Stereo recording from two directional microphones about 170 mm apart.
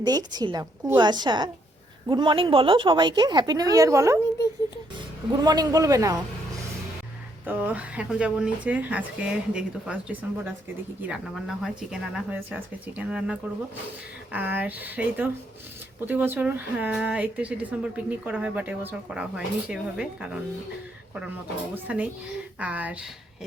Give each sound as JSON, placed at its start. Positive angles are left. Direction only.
{"t": 0.0, "sound": "a woman's voice", "side_deg": -25}
{"t": 5.3, "sound": "a woman's voice", "side_deg": -25}
{"t": 7.4, "sound": "speech", "side_deg": -10}
{"t": 21.9, "sound": "speech", "side_deg": -5}